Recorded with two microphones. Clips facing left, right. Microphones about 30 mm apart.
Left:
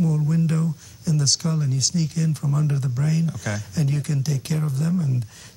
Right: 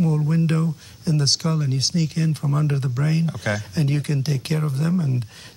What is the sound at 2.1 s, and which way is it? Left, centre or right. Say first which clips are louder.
Speech: right 1 dB; right.